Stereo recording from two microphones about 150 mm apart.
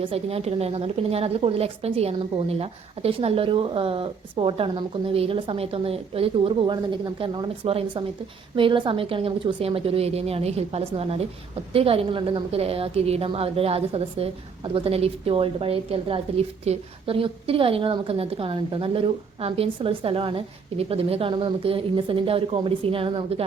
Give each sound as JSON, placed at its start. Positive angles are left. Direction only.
{"t": 0.0, "sound": "a woman's voice", "side_deg": -40}